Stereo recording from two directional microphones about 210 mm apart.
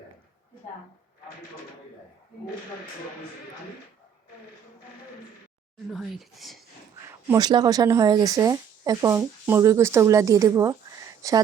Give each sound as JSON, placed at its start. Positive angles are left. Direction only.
{"t": 5.7, "sound": "speech", "side_deg": 0}
{"t": 7.3, "sound": "speech", "side_deg": -20}